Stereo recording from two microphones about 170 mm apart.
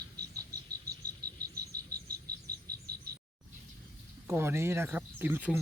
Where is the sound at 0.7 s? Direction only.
65° right (ahead or behind).